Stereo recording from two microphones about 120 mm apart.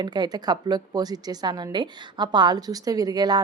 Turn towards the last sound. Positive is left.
turn(degrees=-35)  # may be behind; listen again after turning